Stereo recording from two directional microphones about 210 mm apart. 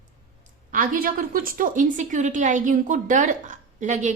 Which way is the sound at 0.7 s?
40° right (ahead or behind).